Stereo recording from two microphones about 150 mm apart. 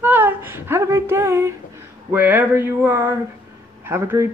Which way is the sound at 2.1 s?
10° right (ahead or behind).